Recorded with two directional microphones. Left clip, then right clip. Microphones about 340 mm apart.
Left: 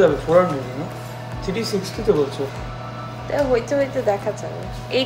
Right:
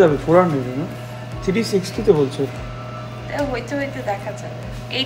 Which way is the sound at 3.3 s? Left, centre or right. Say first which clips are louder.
Left 5 dB; centre.